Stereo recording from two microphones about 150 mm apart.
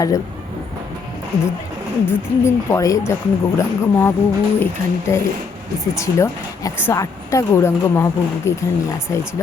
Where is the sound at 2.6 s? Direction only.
20° left (ahead or behind).